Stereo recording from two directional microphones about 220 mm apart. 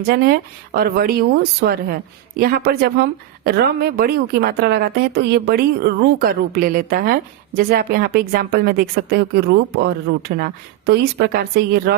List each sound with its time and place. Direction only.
0.0 s speech: 45° right (ahead or behind)